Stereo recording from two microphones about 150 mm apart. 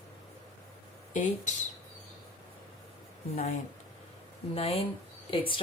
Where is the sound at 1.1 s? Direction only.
55° left (ahead or behind).